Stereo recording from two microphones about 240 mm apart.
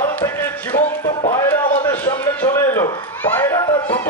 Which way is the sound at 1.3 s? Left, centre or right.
Centre.